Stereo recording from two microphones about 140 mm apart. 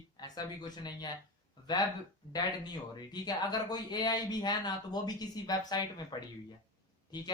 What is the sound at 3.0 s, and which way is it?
Speech, 30° left (ahead or behind).